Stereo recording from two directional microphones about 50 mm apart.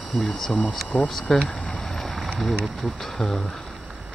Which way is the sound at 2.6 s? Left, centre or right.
Centre.